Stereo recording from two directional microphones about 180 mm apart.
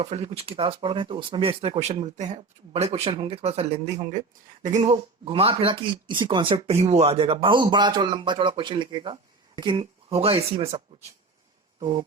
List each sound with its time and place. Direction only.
0.0 s speech: 35° right (ahead or behind)
4.8 s speech: 30° right (ahead or behind)